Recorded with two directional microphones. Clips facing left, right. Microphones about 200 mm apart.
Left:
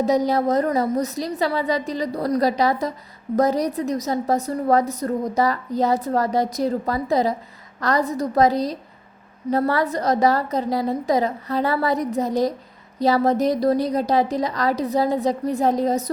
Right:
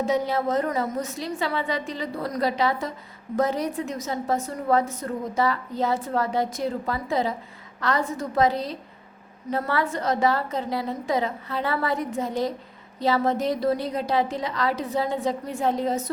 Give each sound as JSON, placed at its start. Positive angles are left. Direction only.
{"t": 0.0, "sound": "a woman's voice", "side_deg": 40}